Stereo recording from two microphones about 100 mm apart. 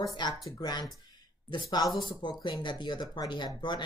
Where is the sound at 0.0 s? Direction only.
45° left (ahead or behind).